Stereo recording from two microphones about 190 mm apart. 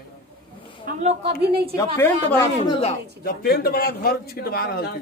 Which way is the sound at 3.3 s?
55° left (ahead or behind).